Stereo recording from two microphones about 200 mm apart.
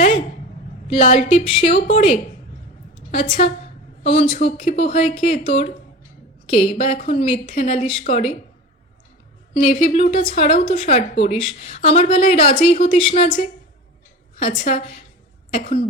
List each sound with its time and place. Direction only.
0.9 s a woman's voice: 35° left (ahead or behind)
5.5 s a woman's voice: 40° left (ahead or behind)
9.6 s a woman's voice: 35° left (ahead or behind)
15.5 s a woman's voice: 40° left (ahead or behind)